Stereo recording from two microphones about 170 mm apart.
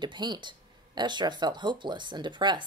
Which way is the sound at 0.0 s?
25° right (ahead or behind).